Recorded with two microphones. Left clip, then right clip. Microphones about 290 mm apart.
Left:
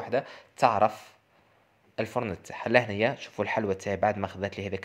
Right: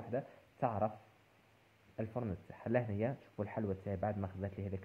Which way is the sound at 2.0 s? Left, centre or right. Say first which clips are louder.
Left 12 dB; centre.